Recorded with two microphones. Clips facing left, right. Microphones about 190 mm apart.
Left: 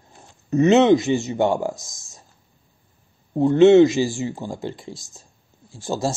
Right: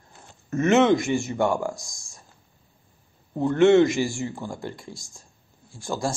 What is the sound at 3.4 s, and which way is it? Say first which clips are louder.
Speech: left 5 dB; 20° left (ahead or behind).